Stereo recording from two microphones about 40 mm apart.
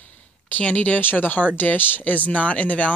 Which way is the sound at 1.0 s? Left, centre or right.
Left.